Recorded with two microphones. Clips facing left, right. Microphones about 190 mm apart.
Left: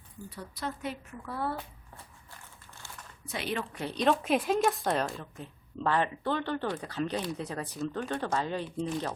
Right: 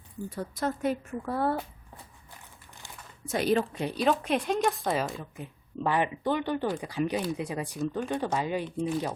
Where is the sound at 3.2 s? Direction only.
45° right (ahead or behind).